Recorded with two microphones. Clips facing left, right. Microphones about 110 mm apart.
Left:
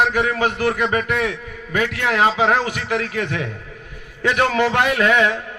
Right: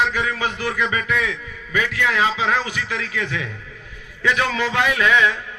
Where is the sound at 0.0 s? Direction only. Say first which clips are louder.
Left 4 dB; 50° left (ahead or behind).